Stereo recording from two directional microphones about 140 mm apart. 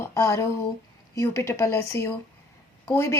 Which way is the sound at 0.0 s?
20° left (ahead or behind).